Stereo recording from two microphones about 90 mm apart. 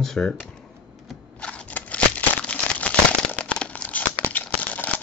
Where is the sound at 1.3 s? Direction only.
15° left (ahead or behind).